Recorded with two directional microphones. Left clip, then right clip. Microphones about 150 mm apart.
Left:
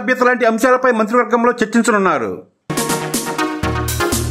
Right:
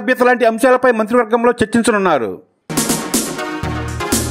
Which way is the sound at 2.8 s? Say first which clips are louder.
Right 1 dB; centre (ahead or behind).